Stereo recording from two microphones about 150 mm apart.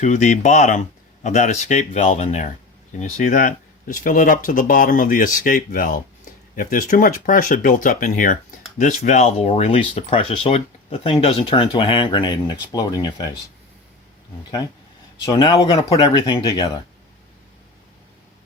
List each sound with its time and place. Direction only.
0.0 s speech: 50° left (ahead or behind); by 13.2 s 25° left (ahead or behind)
15.2 s speech: 30° left (ahead or behind)